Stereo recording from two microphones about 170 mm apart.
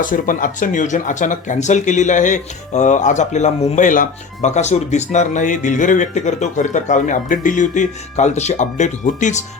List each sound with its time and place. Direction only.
0.0 s speech: 50° left (ahead or behind)